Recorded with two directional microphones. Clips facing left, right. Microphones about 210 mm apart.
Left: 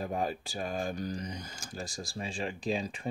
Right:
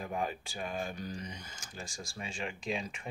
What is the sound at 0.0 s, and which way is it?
Speech, 35° left (ahead or behind).